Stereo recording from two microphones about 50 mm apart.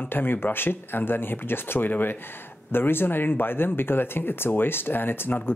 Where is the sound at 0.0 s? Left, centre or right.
Left.